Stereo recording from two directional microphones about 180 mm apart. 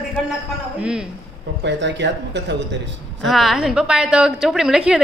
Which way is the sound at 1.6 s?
75° right (ahead or behind).